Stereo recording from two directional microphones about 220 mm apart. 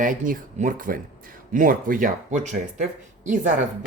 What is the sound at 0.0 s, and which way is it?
Speech, 35° right (ahead or behind).